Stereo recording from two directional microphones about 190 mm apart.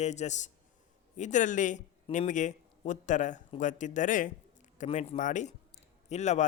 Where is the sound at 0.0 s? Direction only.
35° left (ahead or behind).